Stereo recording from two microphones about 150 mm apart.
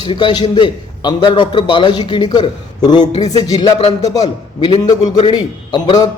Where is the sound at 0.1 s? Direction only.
30° left (ahead or behind).